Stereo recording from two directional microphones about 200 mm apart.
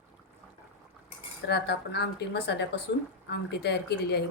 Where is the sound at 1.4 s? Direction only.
55° left (ahead or behind).